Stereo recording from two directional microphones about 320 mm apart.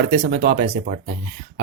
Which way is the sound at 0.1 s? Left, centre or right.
Right.